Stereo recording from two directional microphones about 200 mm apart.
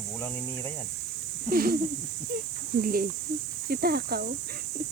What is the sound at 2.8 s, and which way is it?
Speech, 45° right (ahead or behind).